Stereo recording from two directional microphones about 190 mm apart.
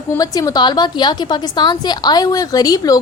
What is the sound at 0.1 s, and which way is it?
A woman's voice, 20° left (ahead or behind).